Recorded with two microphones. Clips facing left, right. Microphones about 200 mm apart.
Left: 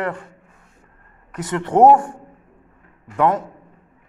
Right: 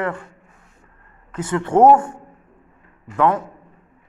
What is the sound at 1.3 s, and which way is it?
Speech, 15° left (ahead or behind).